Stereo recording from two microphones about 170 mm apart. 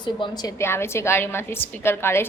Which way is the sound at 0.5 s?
15° left (ahead or behind).